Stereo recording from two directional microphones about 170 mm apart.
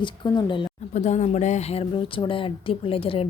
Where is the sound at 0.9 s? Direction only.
45° left (ahead or behind).